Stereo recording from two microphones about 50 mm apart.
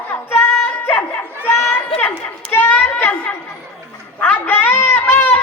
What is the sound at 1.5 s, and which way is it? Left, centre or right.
Speech, left.